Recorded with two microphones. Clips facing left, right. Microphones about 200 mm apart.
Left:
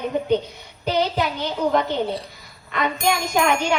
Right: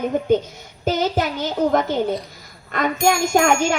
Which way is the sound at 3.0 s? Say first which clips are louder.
Right 4 dB; 45° right (ahead or behind).